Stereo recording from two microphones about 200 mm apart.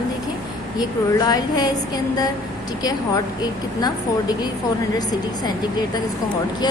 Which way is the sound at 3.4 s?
20° left (ahead or behind).